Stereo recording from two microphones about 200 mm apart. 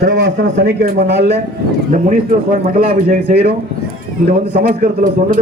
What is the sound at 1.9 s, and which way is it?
A man's voice, 45° right (ahead or behind).